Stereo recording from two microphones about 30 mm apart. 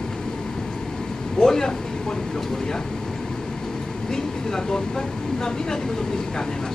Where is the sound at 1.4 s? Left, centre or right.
Centre.